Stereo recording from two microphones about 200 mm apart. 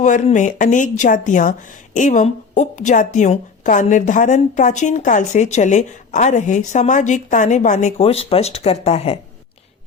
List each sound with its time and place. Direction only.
0.0 s a woman's voice: 40° left (ahead or behind)